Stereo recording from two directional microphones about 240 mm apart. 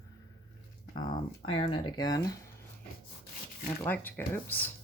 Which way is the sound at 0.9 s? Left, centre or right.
Centre.